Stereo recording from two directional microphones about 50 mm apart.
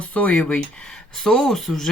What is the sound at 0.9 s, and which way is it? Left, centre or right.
Speech, centre.